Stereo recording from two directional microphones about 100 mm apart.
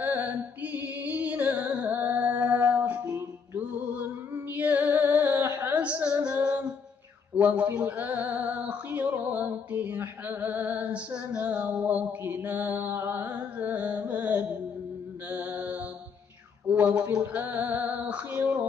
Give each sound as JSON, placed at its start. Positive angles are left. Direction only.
{"t": 0.0, "sound": "music", "side_deg": -20}
{"t": 4.5, "sound": "music", "side_deg": -15}
{"t": 16.6, "sound": "a sound", "side_deg": -15}
{"t": 17.2, "sound": "music", "side_deg": -20}